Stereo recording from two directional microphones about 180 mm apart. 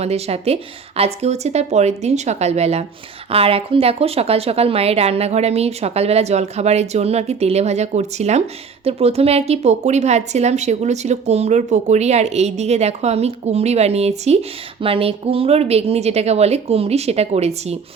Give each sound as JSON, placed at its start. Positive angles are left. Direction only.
{"t": 0.0, "sound": "a woman's voice", "side_deg": -35}